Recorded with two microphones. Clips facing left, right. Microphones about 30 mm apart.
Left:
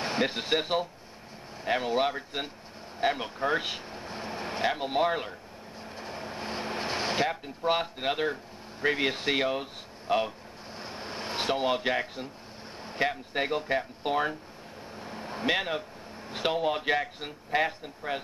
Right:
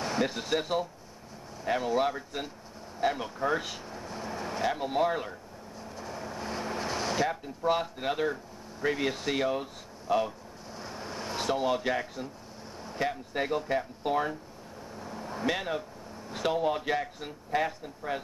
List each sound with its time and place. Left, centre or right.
0.0 s a man's voice: left
5.9 s vehicle: left
8.8 s a man's voice: left
10.8 s air conditioning: left
12.8 s speech: left
15.0 s a sound: left
16.3 s a man's voice: left